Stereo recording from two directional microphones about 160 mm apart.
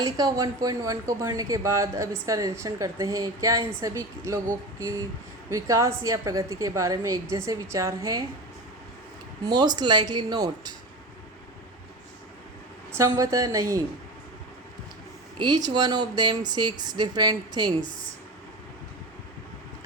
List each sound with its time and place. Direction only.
0.0 s speech: 20° right (ahead or behind)
5.5 s speech: 20° right (ahead or behind)
9.4 s speech: 25° right (ahead or behind)
13.1 s speech: 20° right (ahead or behind)
15.4 s speech: 25° right (ahead or behind)